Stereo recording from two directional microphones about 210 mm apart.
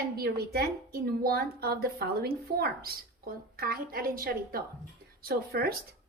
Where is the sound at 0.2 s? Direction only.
50° right (ahead or behind).